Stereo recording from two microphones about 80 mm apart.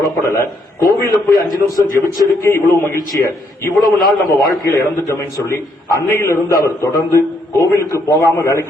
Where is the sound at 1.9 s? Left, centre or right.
Left.